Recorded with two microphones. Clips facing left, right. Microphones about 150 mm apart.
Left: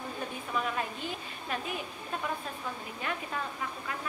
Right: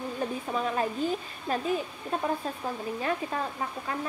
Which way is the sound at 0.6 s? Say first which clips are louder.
Right 5 dB; 35° right (ahead or behind).